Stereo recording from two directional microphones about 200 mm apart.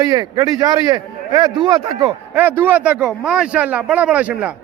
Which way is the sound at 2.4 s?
10° right (ahead or behind).